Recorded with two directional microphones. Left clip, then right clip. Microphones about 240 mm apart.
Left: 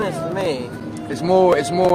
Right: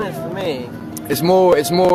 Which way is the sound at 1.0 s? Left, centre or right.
Right.